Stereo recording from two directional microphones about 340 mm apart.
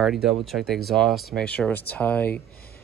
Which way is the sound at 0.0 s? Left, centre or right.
Centre.